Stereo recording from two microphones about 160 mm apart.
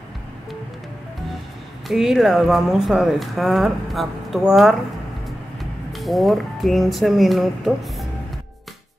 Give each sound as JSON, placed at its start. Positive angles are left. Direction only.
{"t": 1.9, "sound": "speech", "side_deg": 0}